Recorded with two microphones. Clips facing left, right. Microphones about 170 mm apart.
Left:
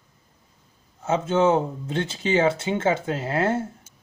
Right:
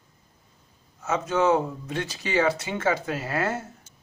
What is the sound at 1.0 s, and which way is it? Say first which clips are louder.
Speech: left 3 dB; 30° left (ahead or behind).